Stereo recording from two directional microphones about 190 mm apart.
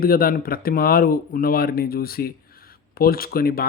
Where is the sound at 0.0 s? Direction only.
50° left (ahead or behind).